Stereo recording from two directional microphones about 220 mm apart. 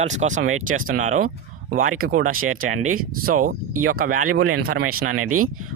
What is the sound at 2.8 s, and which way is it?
Speech, 75° right (ahead or behind).